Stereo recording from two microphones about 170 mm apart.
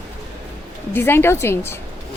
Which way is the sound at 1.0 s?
15° left (ahead or behind).